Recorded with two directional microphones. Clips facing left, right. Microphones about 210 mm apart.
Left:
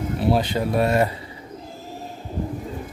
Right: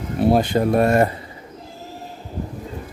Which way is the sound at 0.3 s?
50° right (ahead or behind).